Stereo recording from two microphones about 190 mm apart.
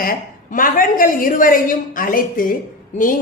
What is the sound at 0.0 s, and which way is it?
A woman's voice, 50° left (ahead or behind).